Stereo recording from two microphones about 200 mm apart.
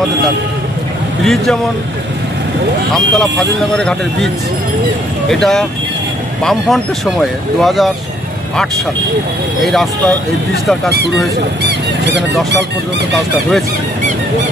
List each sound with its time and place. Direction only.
1.2 s speech: centre (ahead or behind)
2.9 s speech: centre (ahead or behind)
5.3 s speech: centre (ahead or behind)
9.6 s speech: centre (ahead or behind)
12.1 s speech: 60° right (ahead or behind)
13.1 s speech: centre (ahead or behind)